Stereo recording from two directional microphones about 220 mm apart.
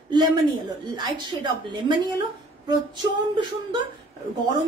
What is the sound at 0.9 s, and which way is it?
A woman's voice, 20° right (ahead or behind).